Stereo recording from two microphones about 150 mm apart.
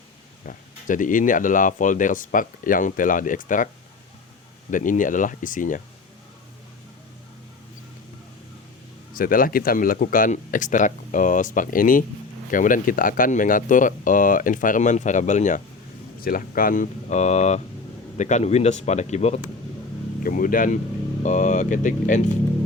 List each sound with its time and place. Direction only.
0.4 s speech: 60° left (ahead or behind)
4.7 s speech: 60° left (ahead or behind)
9.1 s speech: 70° left (ahead or behind)
16.2 s speech: 70° left (ahead or behind); by 19.5 s 45° left (ahead or behind)
20.2 s speech: 70° left (ahead or behind)
21.2 s speech: 55° left (ahead or behind)